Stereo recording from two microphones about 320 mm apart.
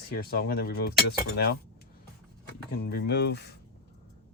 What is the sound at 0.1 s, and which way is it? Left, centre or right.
Speech, left.